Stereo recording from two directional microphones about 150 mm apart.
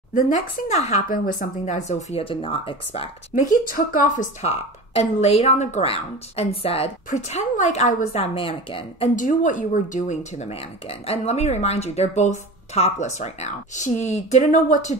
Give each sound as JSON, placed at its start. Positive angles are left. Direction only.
{"t": 0.1, "sound": "speech", "side_deg": 55}
{"t": 3.3, "sound": "speech", "side_deg": 65}
{"t": 9.1, "sound": "speech", "side_deg": 60}